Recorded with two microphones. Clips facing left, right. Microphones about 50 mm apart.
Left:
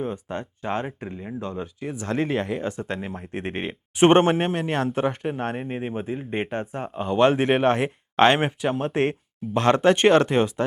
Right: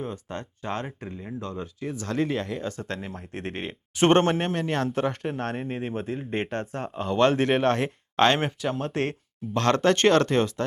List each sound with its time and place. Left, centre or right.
0.0 s speech: centre